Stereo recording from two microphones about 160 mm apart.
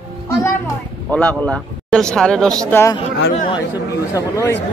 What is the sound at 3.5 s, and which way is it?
Speech, 20° left (ahead or behind).